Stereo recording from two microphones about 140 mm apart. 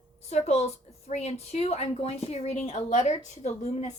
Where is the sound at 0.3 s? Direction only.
50° left (ahead or behind).